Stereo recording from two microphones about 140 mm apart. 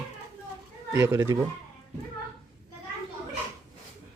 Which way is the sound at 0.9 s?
25° right (ahead or behind).